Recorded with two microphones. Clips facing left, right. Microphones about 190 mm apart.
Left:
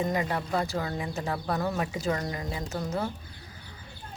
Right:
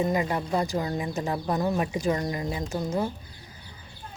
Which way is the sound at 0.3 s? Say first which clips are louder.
Right 2 dB; 15° right (ahead or behind).